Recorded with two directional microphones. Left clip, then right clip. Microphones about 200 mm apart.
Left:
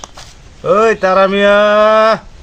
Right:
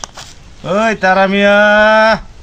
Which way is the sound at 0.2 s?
35° right (ahead or behind).